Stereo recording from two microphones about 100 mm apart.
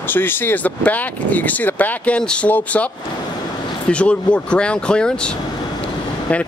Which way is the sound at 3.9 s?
10° left (ahead or behind).